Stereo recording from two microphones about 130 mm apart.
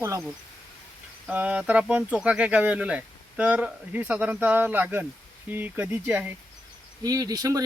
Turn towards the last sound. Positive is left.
turn(degrees=-25)  # may be behind; listen again after turning